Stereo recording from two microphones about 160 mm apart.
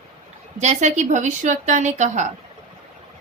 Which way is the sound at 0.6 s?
45° right (ahead or behind).